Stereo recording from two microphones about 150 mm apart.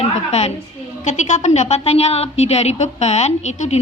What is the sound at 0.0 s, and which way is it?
A woman's voice, 45° left (ahead or behind).